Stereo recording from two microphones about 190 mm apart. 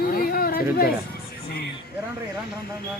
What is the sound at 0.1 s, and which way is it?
Chatter, 50° left (ahead or behind).